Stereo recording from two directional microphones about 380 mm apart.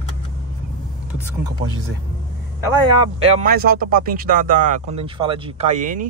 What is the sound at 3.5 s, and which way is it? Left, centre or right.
Speech, right.